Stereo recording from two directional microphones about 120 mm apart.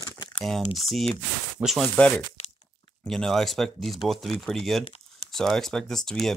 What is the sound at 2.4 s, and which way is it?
Crunch, 65° left (ahead or behind).